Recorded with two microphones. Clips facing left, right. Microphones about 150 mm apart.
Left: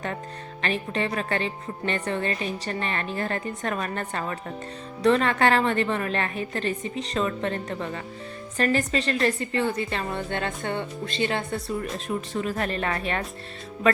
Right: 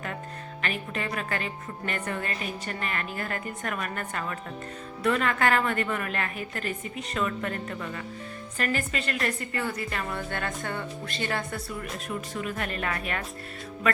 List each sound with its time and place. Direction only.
0.6 s a woman's voice: 30° left (ahead or behind)